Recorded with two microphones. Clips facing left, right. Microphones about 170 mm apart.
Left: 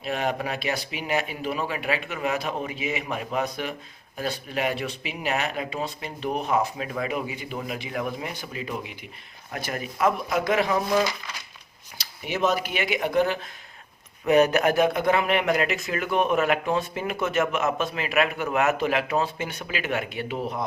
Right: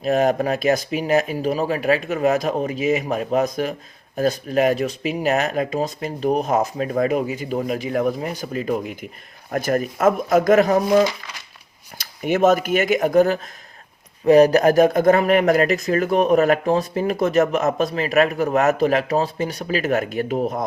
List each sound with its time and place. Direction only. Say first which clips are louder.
0.0 s speech: right 9 dB; 40° right (ahead or behind)